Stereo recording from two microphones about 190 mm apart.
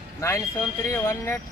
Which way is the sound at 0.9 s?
10° left (ahead or behind).